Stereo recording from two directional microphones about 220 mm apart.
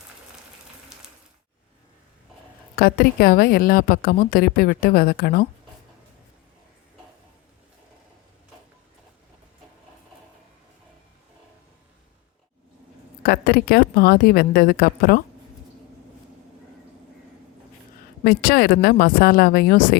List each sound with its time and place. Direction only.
2.7 s a woman's voice: 45° left (ahead or behind)
13.2 s a woman's voice: 45° left (ahead or behind)
18.2 s a woman's voice: 45° left (ahead or behind)